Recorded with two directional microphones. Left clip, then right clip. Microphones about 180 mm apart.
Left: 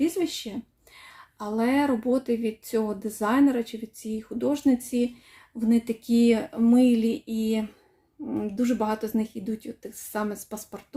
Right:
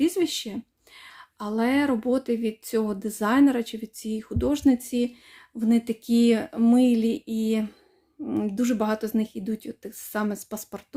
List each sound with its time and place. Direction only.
0.0 s a woman's voice: 35° right (ahead or behind)